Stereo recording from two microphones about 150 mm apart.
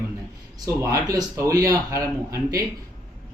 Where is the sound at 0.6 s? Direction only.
20° right (ahead or behind).